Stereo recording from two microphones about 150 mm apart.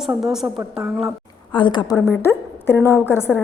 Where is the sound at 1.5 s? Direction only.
30° left (ahead or behind).